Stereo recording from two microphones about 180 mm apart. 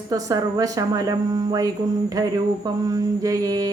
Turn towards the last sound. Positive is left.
turn(degrees=-20)  # may be behind; listen again after turning